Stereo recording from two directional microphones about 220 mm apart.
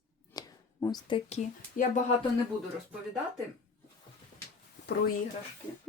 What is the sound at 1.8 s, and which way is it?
Speech, 35° left (ahead or behind).